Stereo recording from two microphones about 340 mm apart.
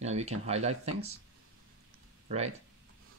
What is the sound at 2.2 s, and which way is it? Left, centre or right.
Speech, centre.